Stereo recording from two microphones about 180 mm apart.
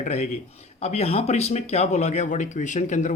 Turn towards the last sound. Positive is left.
turn(degrees=40)  # may be behind; listen again after turning